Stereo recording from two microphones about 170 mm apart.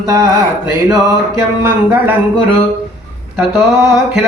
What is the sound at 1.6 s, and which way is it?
Speech, 10° right (ahead or behind).